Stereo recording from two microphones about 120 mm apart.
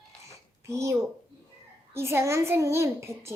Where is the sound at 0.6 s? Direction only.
25° right (ahead or behind).